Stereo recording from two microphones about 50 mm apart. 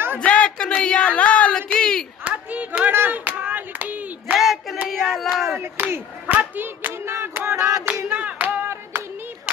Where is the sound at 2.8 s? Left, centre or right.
Right.